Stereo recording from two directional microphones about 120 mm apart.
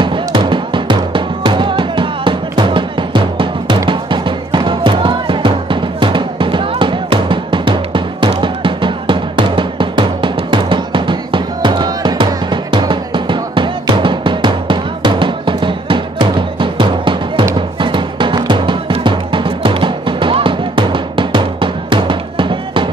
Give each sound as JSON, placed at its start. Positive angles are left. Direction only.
{"t": 0.0, "sound": "music", "side_deg": -40}